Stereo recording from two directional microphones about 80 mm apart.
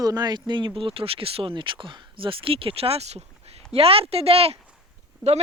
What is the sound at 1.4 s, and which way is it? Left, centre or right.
Speech, right.